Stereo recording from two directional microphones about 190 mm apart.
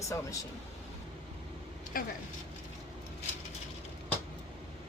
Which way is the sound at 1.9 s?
50° left (ahead or behind).